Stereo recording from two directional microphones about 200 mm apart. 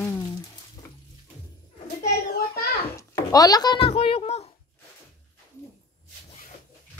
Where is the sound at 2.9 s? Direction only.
15° left (ahead or behind).